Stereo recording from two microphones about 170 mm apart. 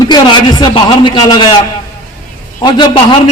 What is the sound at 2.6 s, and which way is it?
Speech, 25° left (ahead or behind).